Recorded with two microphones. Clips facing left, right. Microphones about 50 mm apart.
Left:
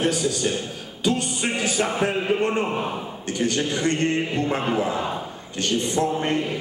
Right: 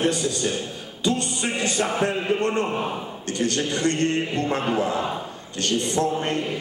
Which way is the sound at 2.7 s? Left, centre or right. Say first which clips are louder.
Even; centre.